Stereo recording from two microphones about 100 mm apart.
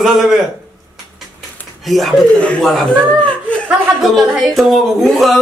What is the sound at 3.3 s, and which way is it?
Chuckle, 10° left (ahead or behind).